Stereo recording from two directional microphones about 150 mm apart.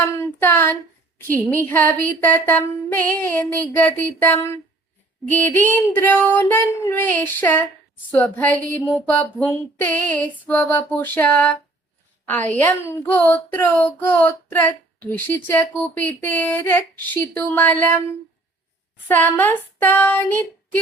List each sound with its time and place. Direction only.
0.0 s a woman's voice: 15° left (ahead or behind)